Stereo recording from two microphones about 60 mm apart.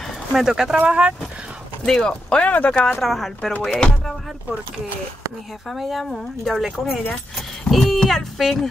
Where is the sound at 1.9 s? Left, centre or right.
Centre.